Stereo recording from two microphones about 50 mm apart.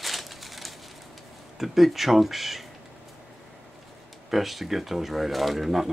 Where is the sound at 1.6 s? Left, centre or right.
Centre.